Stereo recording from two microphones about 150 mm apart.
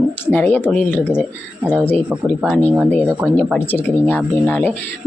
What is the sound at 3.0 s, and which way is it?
Speech, centre (ahead or behind).